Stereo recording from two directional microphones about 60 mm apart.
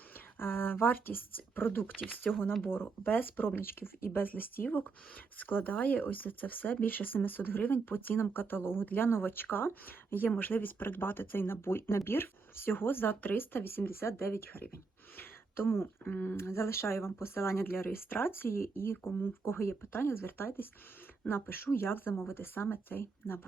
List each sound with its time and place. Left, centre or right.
0.3 s speech: left